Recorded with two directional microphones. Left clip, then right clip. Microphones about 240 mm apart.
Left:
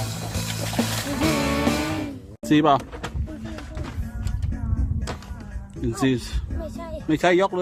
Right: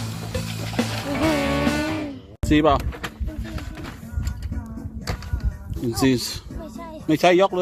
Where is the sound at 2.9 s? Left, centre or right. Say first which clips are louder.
Right 2 dB; right.